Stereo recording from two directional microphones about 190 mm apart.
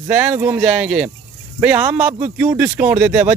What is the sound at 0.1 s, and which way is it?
Speech, 10° right (ahead or behind).